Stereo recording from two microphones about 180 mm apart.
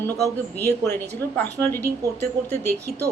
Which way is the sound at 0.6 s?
15° left (ahead or behind).